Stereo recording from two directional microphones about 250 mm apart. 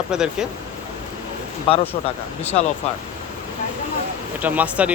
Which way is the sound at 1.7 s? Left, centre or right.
Left.